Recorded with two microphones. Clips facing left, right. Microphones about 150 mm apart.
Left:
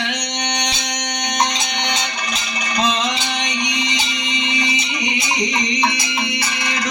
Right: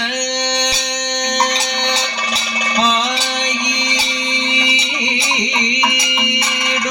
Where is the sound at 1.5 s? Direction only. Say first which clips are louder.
Right 3 dB; 35° right (ahead or behind).